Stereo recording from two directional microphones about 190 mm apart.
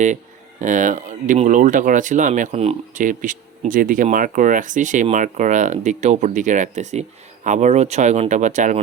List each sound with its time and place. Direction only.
0.6 s speech: 40° right (ahead or behind)